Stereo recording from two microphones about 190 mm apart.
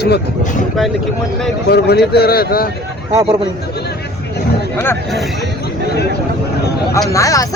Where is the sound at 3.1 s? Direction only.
20° right (ahead or behind).